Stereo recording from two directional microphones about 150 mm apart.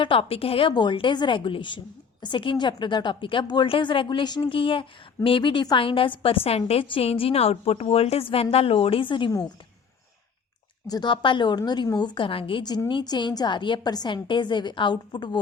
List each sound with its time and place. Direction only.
0.0 s a woman's voice: 35° left (ahead or behind)
10.8 s a woman's voice: 30° left (ahead or behind)